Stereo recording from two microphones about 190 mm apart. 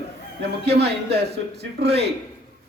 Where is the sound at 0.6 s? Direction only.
60° right (ahead or behind).